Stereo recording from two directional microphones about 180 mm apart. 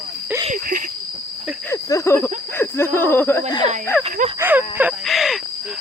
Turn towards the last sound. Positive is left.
turn(degrees=0)  # may be behind; listen again after turning